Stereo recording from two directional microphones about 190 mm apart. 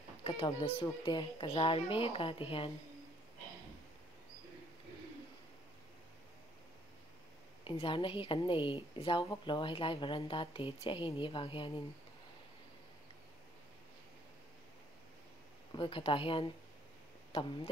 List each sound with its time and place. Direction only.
0.2 s a sound: 30° left (ahead or behind)
0.5 s a woman's voice: 30° left (ahead or behind)
7.6 s a woman's voice: 30° left (ahead or behind)
15.7 s a woman's voice: 25° left (ahead or behind)